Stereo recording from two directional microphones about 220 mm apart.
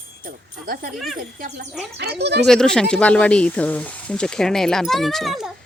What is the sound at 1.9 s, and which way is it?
Speech, 50° right (ahead or behind).